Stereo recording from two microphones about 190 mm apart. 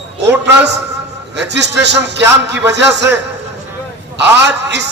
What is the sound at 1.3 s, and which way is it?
A man's voice, 65° right (ahead or behind).